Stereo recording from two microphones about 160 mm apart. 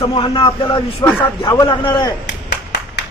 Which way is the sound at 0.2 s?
35° left (ahead or behind).